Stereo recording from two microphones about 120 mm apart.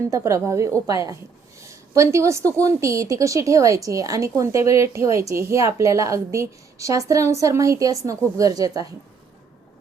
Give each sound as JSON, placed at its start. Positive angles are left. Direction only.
{"t": 0.1, "sound": "a woman's voice", "side_deg": -25}